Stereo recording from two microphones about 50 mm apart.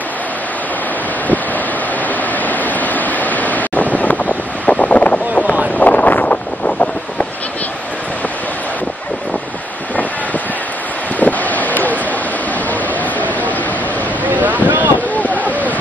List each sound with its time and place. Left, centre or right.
2.4 s wind: left
5.8 s wind noise: left
11.1 s wind: left
14.2 s boat: right
15.1 s a sound: left